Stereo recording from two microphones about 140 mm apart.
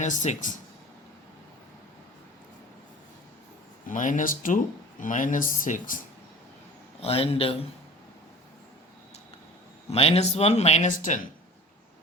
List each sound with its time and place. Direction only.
0.0 s speech: 60° left (ahead or behind)
3.8 s speech: 65° left (ahead or behind)
7.0 s speech: 45° left (ahead or behind)
9.9 s speech: 45° left (ahead or behind); by 11.3 s 60° left (ahead or behind)